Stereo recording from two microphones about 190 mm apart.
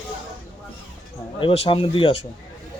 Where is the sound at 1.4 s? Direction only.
30° left (ahead or behind).